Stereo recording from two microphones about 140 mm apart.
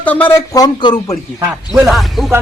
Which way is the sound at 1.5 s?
5° right (ahead or behind).